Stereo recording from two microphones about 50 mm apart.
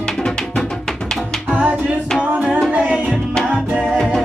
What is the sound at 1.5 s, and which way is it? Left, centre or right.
Music, right.